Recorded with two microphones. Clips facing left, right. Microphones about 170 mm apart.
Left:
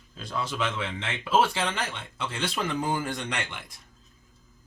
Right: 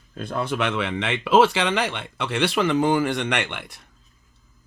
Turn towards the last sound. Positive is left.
turn(degrees=-65)  # may be behind; listen again after turning